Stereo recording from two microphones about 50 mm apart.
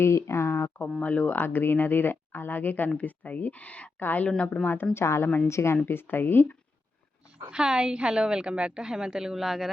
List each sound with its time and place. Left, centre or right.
0.0 s speech: left
1.0 s speech: left
4.0 s speech: left
4.9 s a woman's voice: left
5.7 s speech: left
7.5 s a woman's voice: centre